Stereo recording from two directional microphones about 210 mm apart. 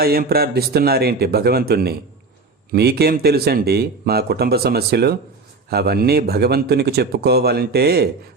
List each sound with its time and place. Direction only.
0.0 s speech: 45° right (ahead or behind)